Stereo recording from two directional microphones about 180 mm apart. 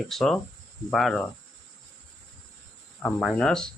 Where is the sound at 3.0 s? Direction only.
5° left (ahead or behind).